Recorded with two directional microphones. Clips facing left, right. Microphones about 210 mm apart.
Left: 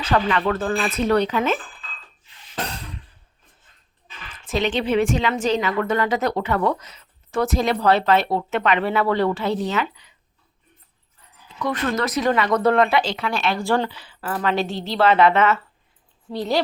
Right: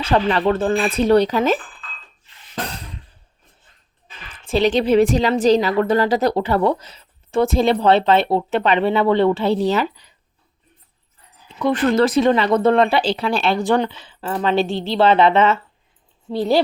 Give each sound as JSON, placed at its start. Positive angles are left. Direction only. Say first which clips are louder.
{"t": 0.0, "sound": "a woman's voice", "louder": "right 3 dB", "side_deg": -30}
{"t": 4.4, "sound": "a woman's voice", "louder": "right 5 dB", "side_deg": -35}
{"t": 11.6, "sound": "speech", "louder": "right 7 dB", "side_deg": -30}
{"t": 13.6, "sound": "speech", "louder": "right 3 dB", "side_deg": -20}